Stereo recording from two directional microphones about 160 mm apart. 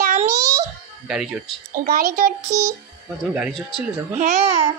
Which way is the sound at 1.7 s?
60° right (ahead or behind).